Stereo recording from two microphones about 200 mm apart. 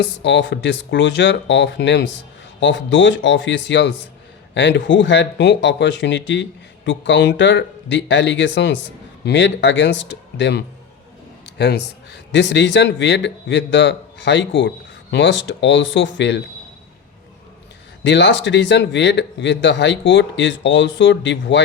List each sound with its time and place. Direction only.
0.2 s speech: 60° left (ahead or behind)
18.0 s speech: 65° left (ahead or behind)